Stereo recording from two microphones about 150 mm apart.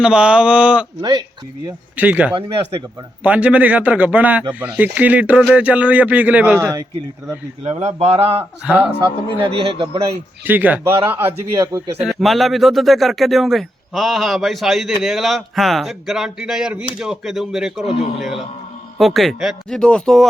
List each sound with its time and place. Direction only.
0.0 s speech: 5° right (ahead or behind)
2.0 s speech: 10° right (ahead or behind)
7.6 s speech: 45° right (ahead or behind)
8.6 s speech: 10° right (ahead or behind)
9.0 s speech: 35° right (ahead or behind)
10.4 s speech: 10° right (ahead or behind)
12.0 s speech: centre (ahead or behind)